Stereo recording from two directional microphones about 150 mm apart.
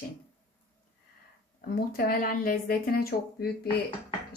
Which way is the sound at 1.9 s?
75° left (ahead or behind).